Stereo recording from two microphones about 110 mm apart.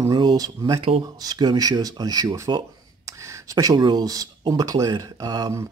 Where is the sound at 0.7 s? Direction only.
65° right (ahead or behind).